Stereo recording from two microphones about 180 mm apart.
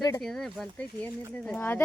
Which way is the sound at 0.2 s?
Centre (ahead or behind).